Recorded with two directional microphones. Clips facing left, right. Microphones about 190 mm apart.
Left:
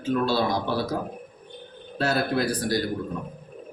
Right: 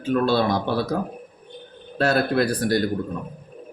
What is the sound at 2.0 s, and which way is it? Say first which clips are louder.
Speech: right 4 dB; 60° right (ahead or behind).